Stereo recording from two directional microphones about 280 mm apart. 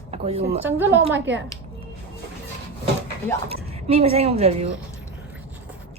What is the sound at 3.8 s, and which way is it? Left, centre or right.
Speech, right.